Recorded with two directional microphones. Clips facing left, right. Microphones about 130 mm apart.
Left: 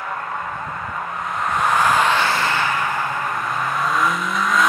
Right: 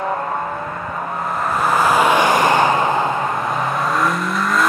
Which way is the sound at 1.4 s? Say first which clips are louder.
Right 1 dB; 5° right (ahead or behind).